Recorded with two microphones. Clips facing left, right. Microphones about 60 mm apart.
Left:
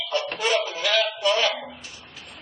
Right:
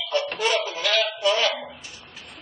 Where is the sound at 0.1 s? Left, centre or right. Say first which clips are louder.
Even; centre.